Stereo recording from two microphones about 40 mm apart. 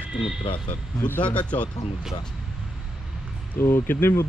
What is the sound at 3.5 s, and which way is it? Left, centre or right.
Speech, left.